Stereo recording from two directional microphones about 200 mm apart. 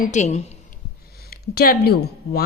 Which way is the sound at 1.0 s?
50° left (ahead or behind).